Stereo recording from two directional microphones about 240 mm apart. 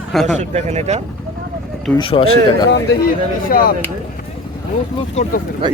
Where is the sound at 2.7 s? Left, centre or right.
Left.